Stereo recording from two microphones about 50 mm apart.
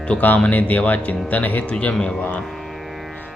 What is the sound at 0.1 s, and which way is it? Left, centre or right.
Speech, left.